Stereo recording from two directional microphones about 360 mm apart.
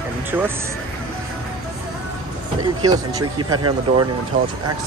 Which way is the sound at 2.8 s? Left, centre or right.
Centre.